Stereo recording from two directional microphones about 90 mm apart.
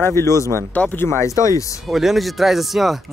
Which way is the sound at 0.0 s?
30° left (ahead or behind).